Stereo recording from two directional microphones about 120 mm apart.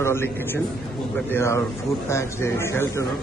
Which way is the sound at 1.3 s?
25° left (ahead or behind).